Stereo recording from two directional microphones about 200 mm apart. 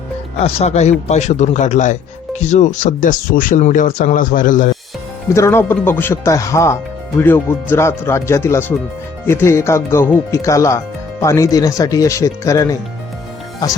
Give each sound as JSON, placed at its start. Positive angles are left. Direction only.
{"t": 0.3, "sound": "a man's voice", "side_deg": 30}
{"t": 5.3, "sound": "speech", "side_deg": 15}